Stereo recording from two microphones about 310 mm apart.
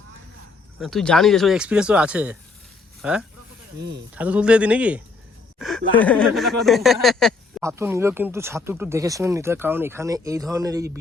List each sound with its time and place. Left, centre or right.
0.8 s speech: centre
3.8 s speech: right
4.1 s speech: centre